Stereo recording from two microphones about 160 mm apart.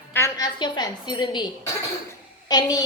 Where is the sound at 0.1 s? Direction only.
20° left (ahead or behind).